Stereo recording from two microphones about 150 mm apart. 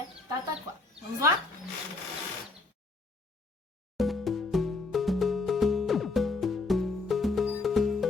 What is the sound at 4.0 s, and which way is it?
Music, centre (ahead or behind).